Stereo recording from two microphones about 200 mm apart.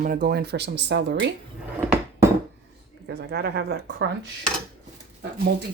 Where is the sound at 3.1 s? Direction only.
55° right (ahead or behind).